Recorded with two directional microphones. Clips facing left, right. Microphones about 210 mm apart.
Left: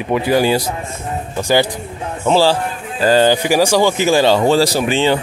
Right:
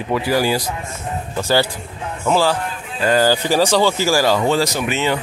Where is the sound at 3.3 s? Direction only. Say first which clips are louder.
Left 2 dB; 15° left (ahead or behind); by 5.1 s 30° left (ahead or behind).